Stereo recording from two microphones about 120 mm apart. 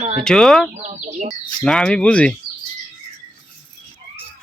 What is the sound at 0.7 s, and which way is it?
Speech, 70° right (ahead or behind).